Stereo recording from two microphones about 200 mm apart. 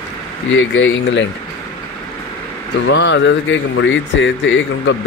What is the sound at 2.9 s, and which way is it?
Speech, 65° left (ahead or behind).